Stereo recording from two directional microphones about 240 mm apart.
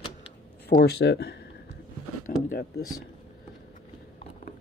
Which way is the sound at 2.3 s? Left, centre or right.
Left.